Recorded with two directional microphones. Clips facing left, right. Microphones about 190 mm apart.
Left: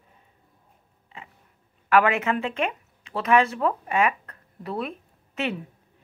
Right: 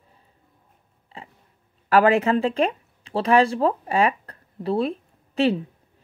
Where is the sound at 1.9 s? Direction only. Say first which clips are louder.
Right 4 dB; 35° right (ahead or behind).